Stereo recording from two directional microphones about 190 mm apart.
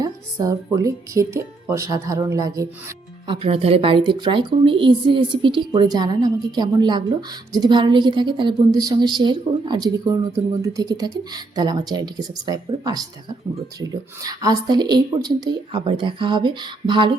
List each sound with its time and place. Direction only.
0.0 s speech: 15° right (ahead or behind)
3.2 s a woman's voice: 30° right (ahead or behind)
14.3 s a woman's voice: 20° right (ahead or behind)